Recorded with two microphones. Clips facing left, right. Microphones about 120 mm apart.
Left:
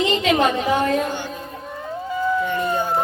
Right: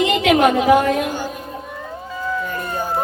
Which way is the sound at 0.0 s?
65° right (ahead or behind).